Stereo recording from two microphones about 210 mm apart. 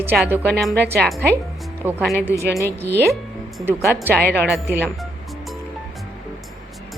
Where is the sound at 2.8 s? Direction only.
55° right (ahead or behind).